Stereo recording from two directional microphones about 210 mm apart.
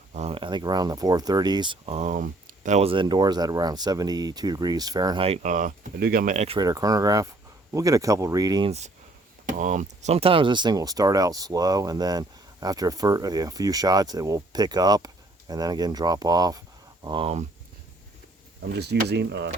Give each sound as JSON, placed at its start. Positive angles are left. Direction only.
{"t": 0.1, "sound": "speech", "side_deg": -30}
{"t": 6.6, "sound": "speech", "side_deg": -15}
{"t": 9.5, "sound": "speech", "side_deg": -35}
{"t": 18.7, "sound": "speech", "side_deg": -50}